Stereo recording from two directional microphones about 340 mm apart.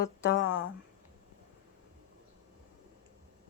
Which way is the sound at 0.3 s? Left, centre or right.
Left.